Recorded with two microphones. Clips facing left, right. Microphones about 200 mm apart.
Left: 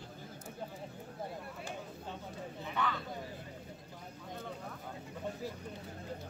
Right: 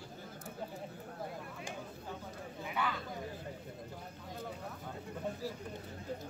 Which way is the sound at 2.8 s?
10° right (ahead or behind).